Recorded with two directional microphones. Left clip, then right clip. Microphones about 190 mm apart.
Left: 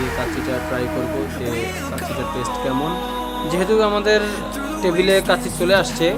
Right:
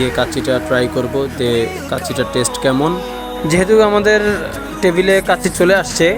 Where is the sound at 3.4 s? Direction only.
35° right (ahead or behind).